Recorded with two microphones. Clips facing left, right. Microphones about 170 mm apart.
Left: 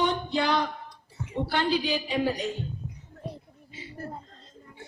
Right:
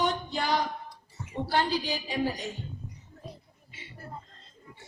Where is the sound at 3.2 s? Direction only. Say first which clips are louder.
Left 6 dB; 60° left (ahead or behind).